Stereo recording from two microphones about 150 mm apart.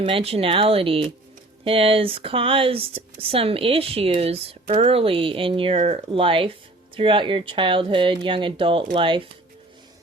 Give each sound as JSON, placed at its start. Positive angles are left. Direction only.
{"t": 0.0, "sound": "speech", "side_deg": -40}